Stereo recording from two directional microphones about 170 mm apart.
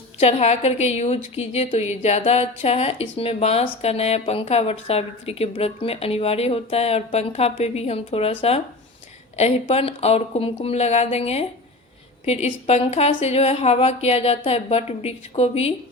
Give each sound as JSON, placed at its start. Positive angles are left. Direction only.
{"t": 0.2, "sound": "a woman's voice", "side_deg": 40}